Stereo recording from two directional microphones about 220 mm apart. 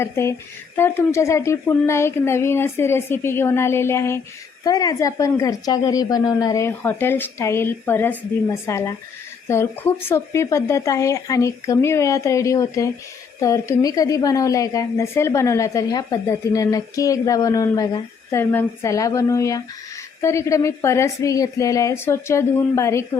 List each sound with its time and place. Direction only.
0.0 s a woman's voice: 10° left (ahead or behind)